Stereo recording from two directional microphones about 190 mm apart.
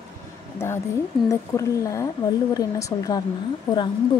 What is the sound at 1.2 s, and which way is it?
A woman's voice, 15° left (ahead or behind).